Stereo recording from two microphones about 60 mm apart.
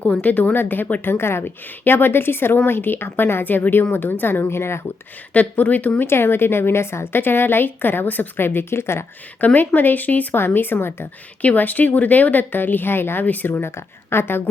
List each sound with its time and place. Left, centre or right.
0.0 s a woman's voice: left
1.0 s a woman's voice: left
5.3 s a woman's voice: left
6.1 s a woman's voice: left
9.4 s a woman's voice: left
11.4 s a woman's voice: left
13.5 s a woman's voice: left